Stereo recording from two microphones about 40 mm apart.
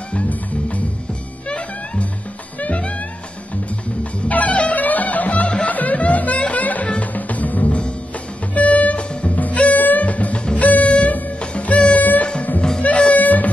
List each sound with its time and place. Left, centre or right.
0.1 s music: left
2.6 s music: left
4.0 s music: left